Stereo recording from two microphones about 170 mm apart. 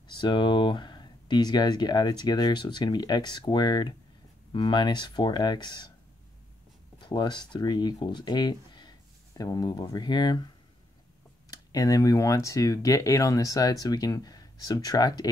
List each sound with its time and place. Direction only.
0.2 s speech: 25° left (ahead or behind)
7.0 s speech: 25° left (ahead or behind)
11.5 s speech: 20° left (ahead or behind)